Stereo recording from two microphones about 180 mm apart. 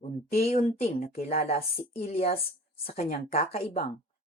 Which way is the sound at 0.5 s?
35° left (ahead or behind).